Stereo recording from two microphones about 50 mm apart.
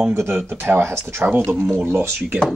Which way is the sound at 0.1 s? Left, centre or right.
Right.